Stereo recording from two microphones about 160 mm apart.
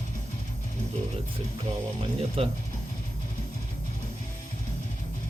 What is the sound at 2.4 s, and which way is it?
Speech, 35° right (ahead or behind).